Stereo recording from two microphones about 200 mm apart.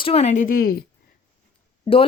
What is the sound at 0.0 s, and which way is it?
Speech, 30° left (ahead or behind).